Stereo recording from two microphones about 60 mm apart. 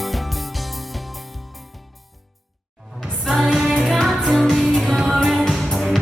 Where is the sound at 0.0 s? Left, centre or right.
Centre.